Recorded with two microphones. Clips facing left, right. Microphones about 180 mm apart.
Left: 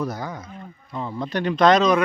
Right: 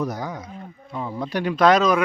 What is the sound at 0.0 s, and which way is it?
Speech, 15° right (ahead or behind).